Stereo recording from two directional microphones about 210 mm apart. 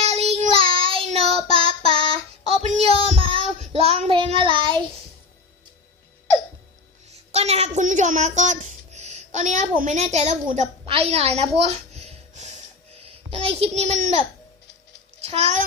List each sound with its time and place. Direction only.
0.0 s child singing: 30° right (ahead or behind)
7.3 s a child's voice: 30° right (ahead or behind)
15.2 s a child's voice: 30° right (ahead or behind)